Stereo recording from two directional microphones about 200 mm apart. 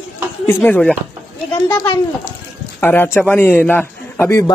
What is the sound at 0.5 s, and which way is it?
Speech, 10° left (ahead or behind).